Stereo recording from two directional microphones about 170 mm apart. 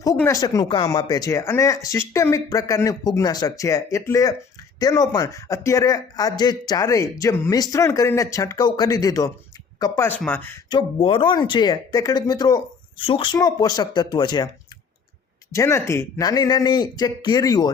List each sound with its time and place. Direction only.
0.2 s a man's voice: 20° left (ahead or behind)
10.7 s a man's voice: 30° left (ahead or behind)
15.5 s a man's voice: 15° left (ahead or behind)